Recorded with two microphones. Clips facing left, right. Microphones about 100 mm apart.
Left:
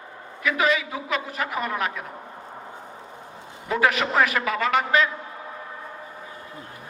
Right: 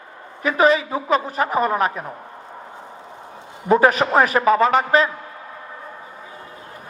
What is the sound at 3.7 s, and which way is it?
A man's voice, 35° right (ahead or behind).